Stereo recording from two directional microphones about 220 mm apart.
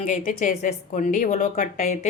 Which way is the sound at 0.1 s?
35° left (ahead or behind).